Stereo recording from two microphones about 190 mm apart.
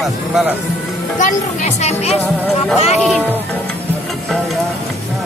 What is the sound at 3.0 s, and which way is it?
Speech, 5° right (ahead or behind).